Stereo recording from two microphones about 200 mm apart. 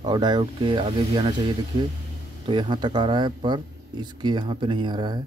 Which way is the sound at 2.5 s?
25° right (ahead or behind).